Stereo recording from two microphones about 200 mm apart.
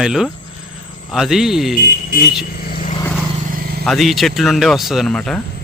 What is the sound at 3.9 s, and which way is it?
Speech, centre (ahead or behind).